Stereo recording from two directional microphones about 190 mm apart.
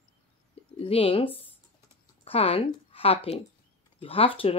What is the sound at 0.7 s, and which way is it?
Speech, 30° left (ahead or behind).